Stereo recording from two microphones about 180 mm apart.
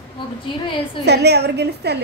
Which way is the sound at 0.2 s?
30° left (ahead or behind).